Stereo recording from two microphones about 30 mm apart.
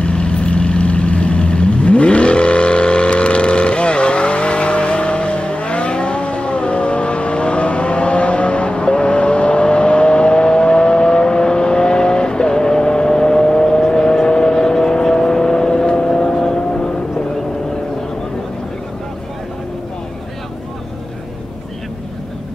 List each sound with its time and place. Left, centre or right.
0.0 s vehicle: left